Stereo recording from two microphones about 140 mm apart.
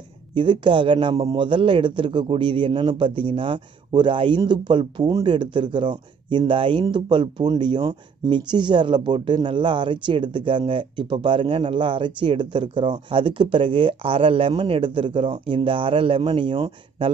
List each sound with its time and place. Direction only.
0.3 s speech: 35° right (ahead or behind)